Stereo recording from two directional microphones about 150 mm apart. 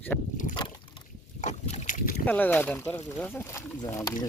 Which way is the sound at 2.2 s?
10° left (ahead or behind).